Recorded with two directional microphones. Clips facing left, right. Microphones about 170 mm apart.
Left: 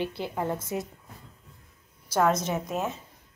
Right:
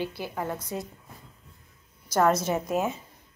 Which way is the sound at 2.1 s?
Centre (ahead or behind).